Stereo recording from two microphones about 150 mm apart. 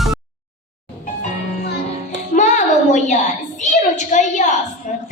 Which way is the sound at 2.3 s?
60° left (ahead or behind).